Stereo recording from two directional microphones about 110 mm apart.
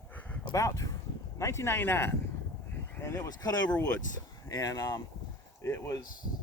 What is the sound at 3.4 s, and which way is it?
A man's voice, 40° left (ahead or behind).